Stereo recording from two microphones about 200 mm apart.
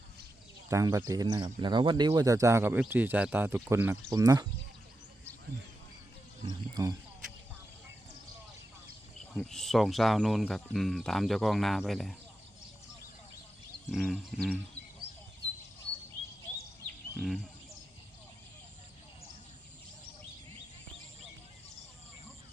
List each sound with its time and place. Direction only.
0.7 s speech: 15° right (ahead or behind)
6.8 s speech: 20° right (ahead or behind)
9.3 s speech: centre (ahead or behind)
13.8 s speech: centre (ahead or behind)
17.2 s speech: centre (ahead or behind)